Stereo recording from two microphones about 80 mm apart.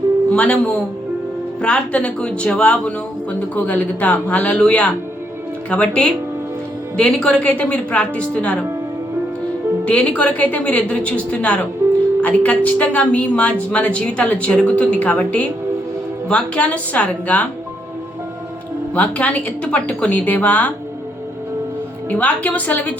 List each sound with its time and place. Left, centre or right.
0.3 s speech: centre
9.8 s speech: centre
11.8 s music: right
12.2 s a woman's voice: centre
18.9 s a woman's voice: centre
22.1 s a woman's voice: centre